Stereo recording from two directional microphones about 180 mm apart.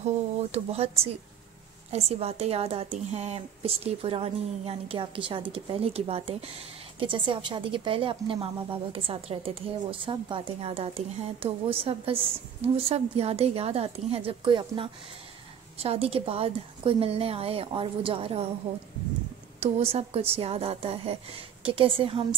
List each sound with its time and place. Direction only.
0.5 s a woman's voice: 35° right (ahead or behind)
19.6 s a woman's voice: 35° right (ahead or behind)